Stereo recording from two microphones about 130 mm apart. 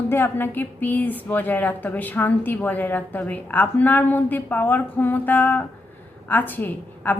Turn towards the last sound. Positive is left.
turn(degrees=15)  # may be behind; listen again after turning